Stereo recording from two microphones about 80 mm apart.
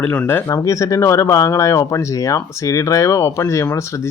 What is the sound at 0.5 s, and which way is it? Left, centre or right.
Speech, left.